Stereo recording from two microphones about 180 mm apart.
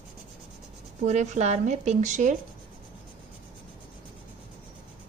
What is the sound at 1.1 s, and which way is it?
A woman's voice, 40° right (ahead or behind).